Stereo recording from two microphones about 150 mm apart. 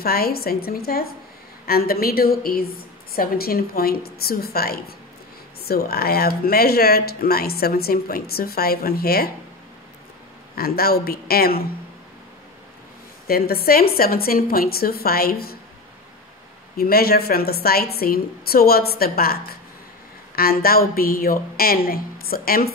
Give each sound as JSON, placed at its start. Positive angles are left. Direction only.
{"t": 0.0, "sound": "a woman's voice", "side_deg": 90}
{"t": 10.5, "sound": "speech", "side_deg": 90}
{"t": 13.3, "sound": "speech", "side_deg": 90}
{"t": 16.7, "sound": "a woman's voice", "side_deg": 90}